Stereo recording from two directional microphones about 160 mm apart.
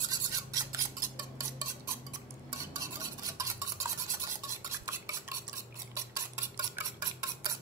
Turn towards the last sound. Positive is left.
turn(degrees=-20)  # may be behind; listen again after turning